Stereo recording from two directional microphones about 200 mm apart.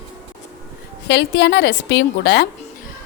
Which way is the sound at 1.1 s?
60° left (ahead or behind).